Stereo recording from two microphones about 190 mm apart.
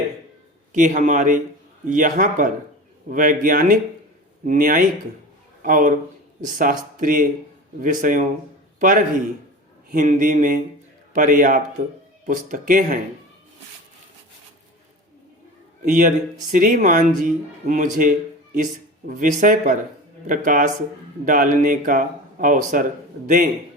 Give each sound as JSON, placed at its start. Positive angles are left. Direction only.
{"t": 0.7, "sound": "a man's voice", "side_deg": -40}
{"t": 15.8, "sound": "speech", "side_deg": -45}